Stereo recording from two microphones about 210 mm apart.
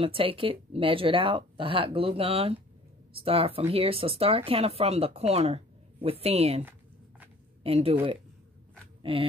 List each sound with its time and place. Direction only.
0.0 s speech: 25° right (ahead or behind)
7.6 s speech: 25° right (ahead or behind)